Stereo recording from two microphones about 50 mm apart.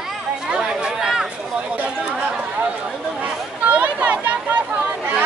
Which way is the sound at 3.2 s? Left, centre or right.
Right.